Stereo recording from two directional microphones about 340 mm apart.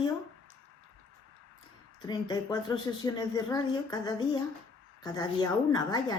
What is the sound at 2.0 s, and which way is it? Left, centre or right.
Speech, centre.